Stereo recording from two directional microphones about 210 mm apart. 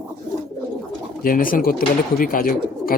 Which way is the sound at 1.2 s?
40° left (ahead or behind).